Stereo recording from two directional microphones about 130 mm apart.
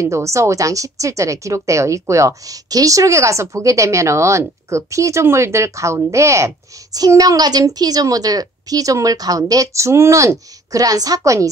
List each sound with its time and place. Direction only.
0.0 s speech: 25° right (ahead or behind)